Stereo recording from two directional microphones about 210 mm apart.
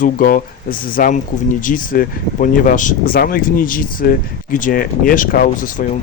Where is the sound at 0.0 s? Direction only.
40° left (ahead or behind).